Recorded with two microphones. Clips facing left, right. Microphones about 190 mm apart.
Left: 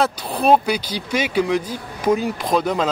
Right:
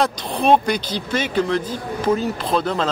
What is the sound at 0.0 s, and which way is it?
Speech, 5° left (ahead or behind).